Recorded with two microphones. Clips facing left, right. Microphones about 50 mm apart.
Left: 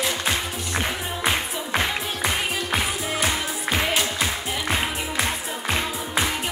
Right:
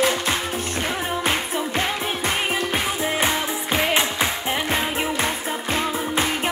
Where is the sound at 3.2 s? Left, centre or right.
Right.